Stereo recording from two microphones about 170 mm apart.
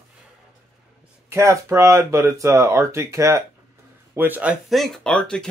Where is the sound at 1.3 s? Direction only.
15° right (ahead or behind).